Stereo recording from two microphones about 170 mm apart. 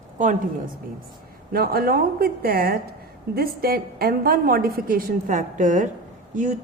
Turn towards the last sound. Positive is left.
turn(degrees=-50)  # may be behind; listen again after turning